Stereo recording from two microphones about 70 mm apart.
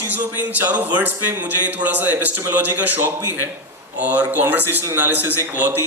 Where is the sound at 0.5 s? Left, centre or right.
Right.